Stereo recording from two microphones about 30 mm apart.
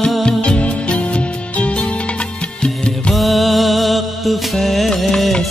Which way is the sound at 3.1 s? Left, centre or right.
Centre.